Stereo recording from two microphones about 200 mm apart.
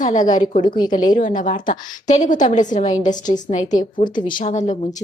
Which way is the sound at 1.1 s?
40° left (ahead or behind).